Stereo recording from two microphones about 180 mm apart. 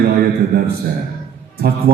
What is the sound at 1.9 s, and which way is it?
Speech, 55° right (ahead or behind).